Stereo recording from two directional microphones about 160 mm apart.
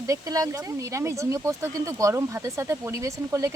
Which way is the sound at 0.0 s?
20° right (ahead or behind).